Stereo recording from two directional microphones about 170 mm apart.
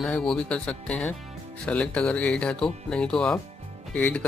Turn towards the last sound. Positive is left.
turn(degrees=10)  # may be behind; listen again after turning